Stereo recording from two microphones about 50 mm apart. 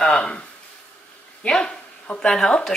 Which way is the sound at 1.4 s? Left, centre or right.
Centre.